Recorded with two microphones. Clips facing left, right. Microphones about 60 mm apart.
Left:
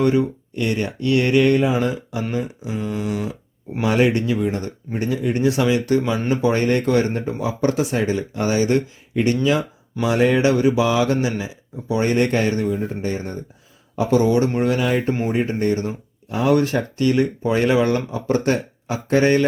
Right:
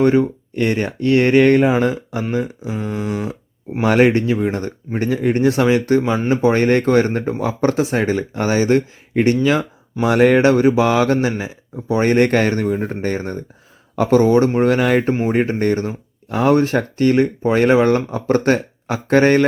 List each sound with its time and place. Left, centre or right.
0.0 s speech: right
2.8 s a sound: right
3.8 s a man's voice: right
4.1 s speech: right
10.0 s a man's voice: right